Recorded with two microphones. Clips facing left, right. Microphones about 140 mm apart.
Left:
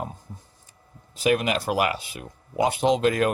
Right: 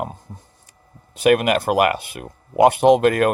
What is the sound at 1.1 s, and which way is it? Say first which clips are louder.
Speech: right 6 dB; 60° right (ahead or behind).